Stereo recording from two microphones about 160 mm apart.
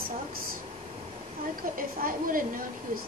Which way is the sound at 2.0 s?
60° right (ahead or behind).